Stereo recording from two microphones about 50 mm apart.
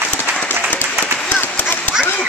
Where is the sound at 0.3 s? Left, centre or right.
Right.